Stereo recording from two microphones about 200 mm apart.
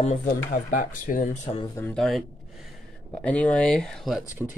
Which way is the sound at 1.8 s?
5° left (ahead or behind).